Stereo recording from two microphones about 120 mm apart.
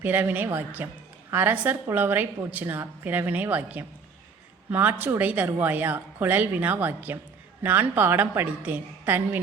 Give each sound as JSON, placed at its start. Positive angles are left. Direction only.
{"t": 0.0, "sound": "a woman's voice", "side_deg": -15}